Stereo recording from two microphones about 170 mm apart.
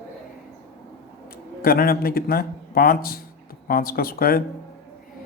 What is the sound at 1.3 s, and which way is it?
A man's voice, 60° left (ahead or behind).